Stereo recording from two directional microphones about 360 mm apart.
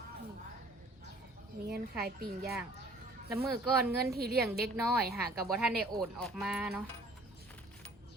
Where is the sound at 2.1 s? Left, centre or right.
Right.